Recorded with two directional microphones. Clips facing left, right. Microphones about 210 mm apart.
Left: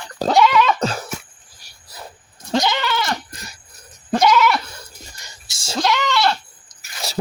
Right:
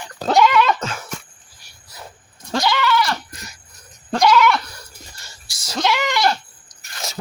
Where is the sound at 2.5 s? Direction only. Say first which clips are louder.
Right 1 dB; 20° left (ahead or behind).